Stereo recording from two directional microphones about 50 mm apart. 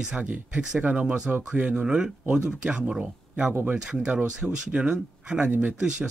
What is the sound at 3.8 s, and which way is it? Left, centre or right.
Speech, centre.